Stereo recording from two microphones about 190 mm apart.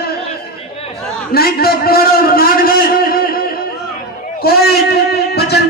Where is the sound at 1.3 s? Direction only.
55° left (ahead or behind).